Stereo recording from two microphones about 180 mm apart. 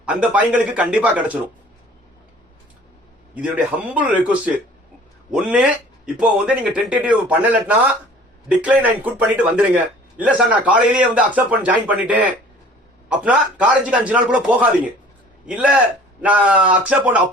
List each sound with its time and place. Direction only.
0.0 s a man's voice: 5° right (ahead or behind)
3.3 s a man's voice: 10° right (ahead or behind)